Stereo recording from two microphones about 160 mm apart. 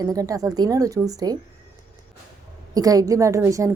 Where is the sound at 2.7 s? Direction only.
25° right (ahead or behind).